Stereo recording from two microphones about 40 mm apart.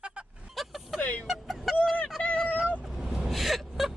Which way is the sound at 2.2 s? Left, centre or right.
Left.